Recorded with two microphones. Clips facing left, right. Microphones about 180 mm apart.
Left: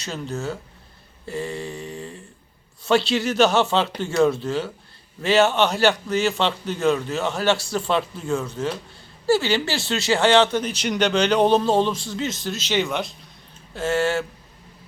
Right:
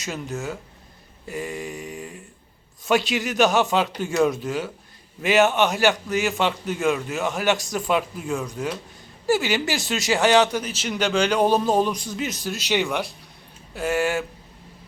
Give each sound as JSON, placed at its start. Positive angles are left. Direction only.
{"t": 1.3, "sound": "mantra", "side_deg": -15}
{"t": 2.8, "sound": "a man's voice", "side_deg": -15}